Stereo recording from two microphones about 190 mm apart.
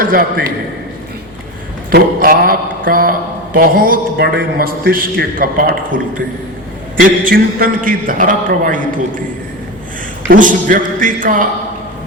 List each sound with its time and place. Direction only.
0.0 s a man's voice: 50° right (ahead or behind)
1.9 s a man's voice: 50° right (ahead or behind)
7.0 s a man's voice: 50° right (ahead or behind)
10.2 s a man's voice: 45° right (ahead or behind)